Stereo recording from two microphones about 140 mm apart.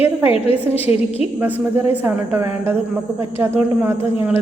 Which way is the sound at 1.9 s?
15° right (ahead or behind).